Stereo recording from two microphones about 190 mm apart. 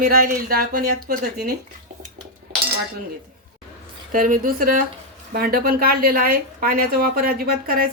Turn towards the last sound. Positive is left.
turn(degrees=-50)  # may be behind; listen again after turning